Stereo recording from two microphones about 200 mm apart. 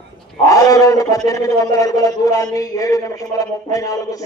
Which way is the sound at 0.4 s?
15° left (ahead or behind).